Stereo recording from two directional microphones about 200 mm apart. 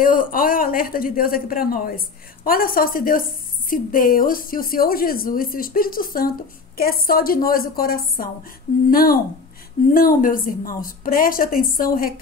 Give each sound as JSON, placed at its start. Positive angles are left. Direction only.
{"t": 0.0, "sound": "a woman's voice", "side_deg": 45}